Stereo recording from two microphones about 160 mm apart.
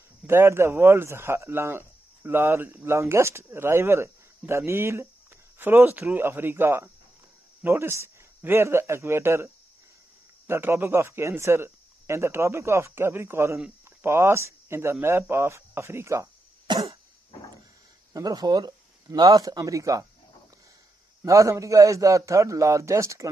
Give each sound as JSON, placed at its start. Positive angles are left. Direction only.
{"t": 0.3, "sound": "a man's voice", "side_deg": -15}
{"t": 18.1, "sound": "a man's voice", "side_deg": -25}
{"t": 21.2, "sound": "a man's voice", "side_deg": -20}